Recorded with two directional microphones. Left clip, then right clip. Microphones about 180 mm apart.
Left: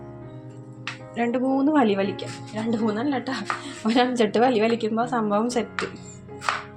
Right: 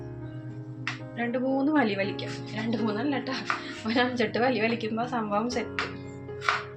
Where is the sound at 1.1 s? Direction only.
50° left (ahead or behind); by 3.1 s 30° left (ahead or behind).